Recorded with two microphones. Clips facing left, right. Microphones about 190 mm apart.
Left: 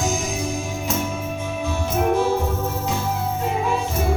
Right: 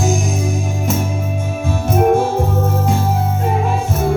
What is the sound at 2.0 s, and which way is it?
Music, 50° right (ahead or behind).